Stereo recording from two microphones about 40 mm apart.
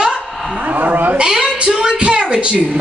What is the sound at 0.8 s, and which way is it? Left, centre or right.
Cat, right.